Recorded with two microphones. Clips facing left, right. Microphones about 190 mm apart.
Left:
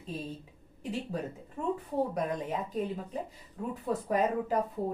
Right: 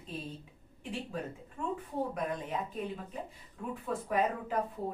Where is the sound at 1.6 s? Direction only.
40° left (ahead or behind).